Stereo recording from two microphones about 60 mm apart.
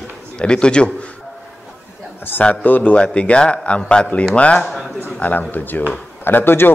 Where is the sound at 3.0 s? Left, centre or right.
Centre.